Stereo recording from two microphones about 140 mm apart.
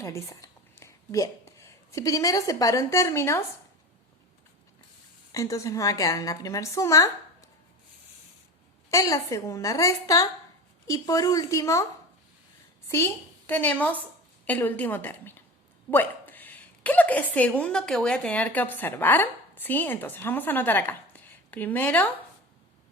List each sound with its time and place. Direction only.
0.0 s a woman's voice: 20° left (ahead or behind)
5.3 s a woman's voice: 25° left (ahead or behind)
8.9 s a woman's voice: 25° left (ahead or behind)
12.9 s a woman's voice: 20° left (ahead or behind)